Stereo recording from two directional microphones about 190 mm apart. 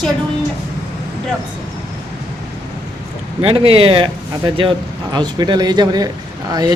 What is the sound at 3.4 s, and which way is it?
Speech, 30° right (ahead or behind).